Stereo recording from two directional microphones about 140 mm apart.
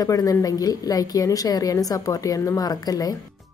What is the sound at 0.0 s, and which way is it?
A woman's voice, 25° left (ahead or behind).